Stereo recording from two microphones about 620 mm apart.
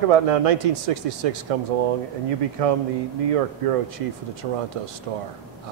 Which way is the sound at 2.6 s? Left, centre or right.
Right.